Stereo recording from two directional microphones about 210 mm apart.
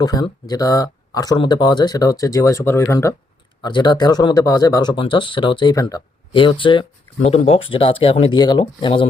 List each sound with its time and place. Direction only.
0.0 s speech: 20° left (ahead or behind)